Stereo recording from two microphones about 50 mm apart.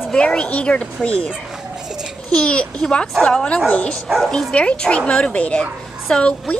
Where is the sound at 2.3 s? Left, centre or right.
Centre.